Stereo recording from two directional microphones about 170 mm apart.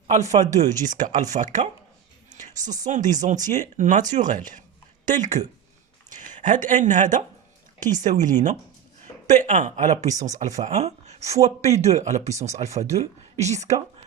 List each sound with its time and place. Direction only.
0.3 s speech: 45° right (ahead or behind)